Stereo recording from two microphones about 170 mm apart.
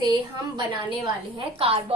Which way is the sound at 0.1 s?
25° right (ahead or behind).